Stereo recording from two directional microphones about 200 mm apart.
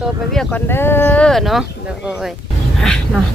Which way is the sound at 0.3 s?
10° left (ahead or behind).